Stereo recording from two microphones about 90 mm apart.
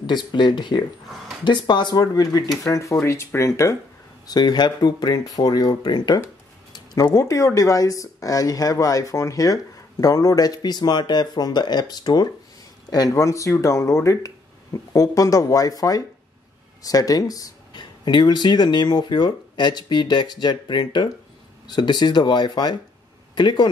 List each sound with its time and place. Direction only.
0.0 s speech: 55° left (ahead or behind); by 3.7 s 35° left (ahead or behind)
4.3 s speech: 50° left (ahead or behind)
6.7 s a sound: 50° left (ahead or behind)
7.2 s speech: 35° left (ahead or behind)
17.7 s speech: 60° left (ahead or behind)